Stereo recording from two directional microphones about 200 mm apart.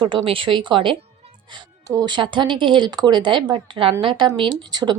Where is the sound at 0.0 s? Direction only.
25° right (ahead or behind).